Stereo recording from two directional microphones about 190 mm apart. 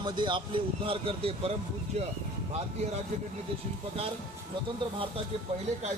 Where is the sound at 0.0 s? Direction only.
25° right (ahead or behind).